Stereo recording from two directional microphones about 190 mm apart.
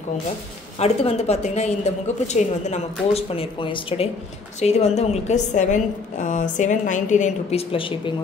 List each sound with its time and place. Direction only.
0.7 s a woman's voice: 35° left (ahead or behind)